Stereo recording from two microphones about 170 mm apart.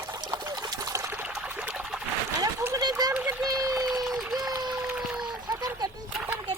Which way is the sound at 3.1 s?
5° right (ahead or behind).